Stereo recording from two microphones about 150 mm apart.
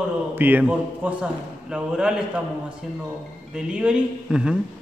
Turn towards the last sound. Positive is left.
turn(degrees=-5)  # may be behind; listen again after turning